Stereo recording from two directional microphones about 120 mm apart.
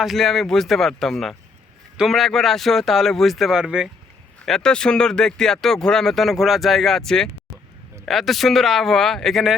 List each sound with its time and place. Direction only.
0.0 s speech: centre (ahead or behind)
4.4 s speech: 5° left (ahead or behind)